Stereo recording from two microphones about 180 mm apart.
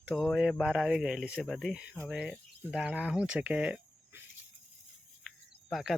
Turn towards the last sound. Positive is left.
turn(degrees=0)  # may be behind; listen again after turning